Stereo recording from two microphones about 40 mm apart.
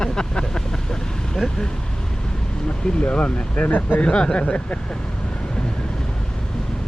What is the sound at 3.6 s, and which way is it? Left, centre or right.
Speech, left.